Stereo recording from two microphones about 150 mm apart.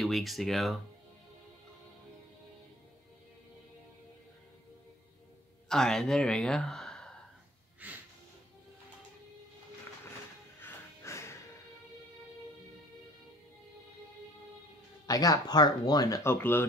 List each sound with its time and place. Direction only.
0.0 s speech: centre (ahead or behind)
5.7 s speech: 5° left (ahead or behind)
7.8 s music: 10° right (ahead or behind)
10.6 s music: 20° left (ahead or behind)
15.0 s speech: 25° left (ahead or behind)